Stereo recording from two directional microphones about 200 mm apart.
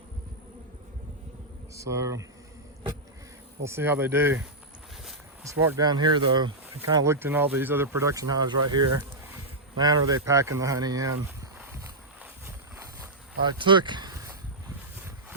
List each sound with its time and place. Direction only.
1.7 s speech: 15° right (ahead or behind)
3.6 s speech: 10° right (ahead or behind)
5.5 s speech: 15° right (ahead or behind)
12.2 s a sound: 10° right (ahead or behind)
13.5 s speech: 25° right (ahead or behind)